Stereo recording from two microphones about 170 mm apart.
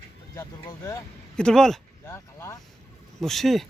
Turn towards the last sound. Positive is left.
turn(degrees=0)  # may be behind; listen again after turning